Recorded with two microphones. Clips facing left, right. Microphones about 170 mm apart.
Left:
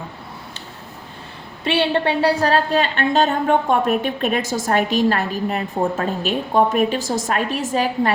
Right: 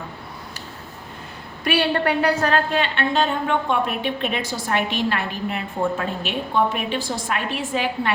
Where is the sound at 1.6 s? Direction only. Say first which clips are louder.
Left 2 dB; 25° left (ahead or behind).